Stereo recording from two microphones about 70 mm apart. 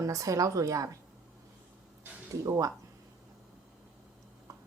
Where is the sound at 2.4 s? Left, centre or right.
Right.